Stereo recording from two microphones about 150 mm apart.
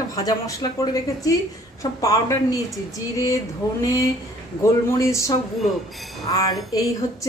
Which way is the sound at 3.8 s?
20° left (ahead or behind).